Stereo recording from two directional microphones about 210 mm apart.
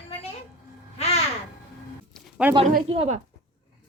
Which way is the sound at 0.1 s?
30° left (ahead or behind).